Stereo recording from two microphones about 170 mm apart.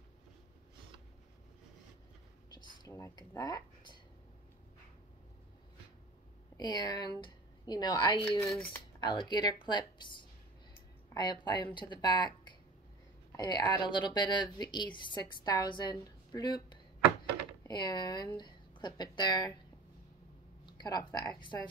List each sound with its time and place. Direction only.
2.5 s a sound: 25° left (ahead or behind)
6.5 s a woman's voice: 25° left (ahead or behind)
11.1 s a woman's voice: 25° left (ahead or behind)
13.4 s a woman's voice: 25° left (ahead or behind)
20.6 s speech: 25° left (ahead or behind)